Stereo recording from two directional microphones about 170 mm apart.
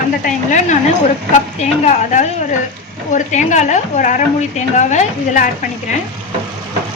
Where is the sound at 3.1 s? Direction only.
45° left (ahead or behind).